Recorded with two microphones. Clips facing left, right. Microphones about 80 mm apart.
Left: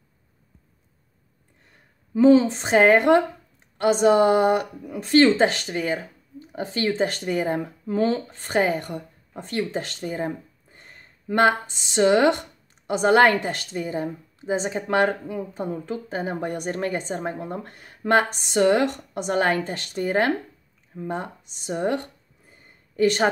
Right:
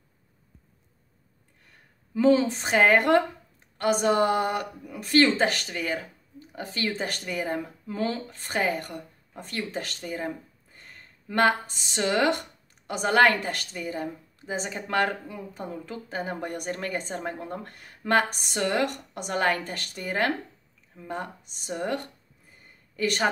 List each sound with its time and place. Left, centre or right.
2.1 s speech: left